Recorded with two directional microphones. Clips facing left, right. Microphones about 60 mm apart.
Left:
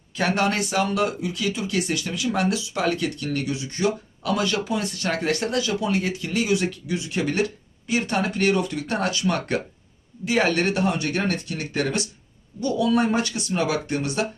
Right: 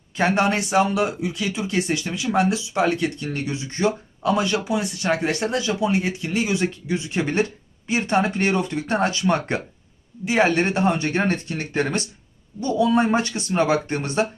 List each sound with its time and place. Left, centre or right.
0.2 s speech: right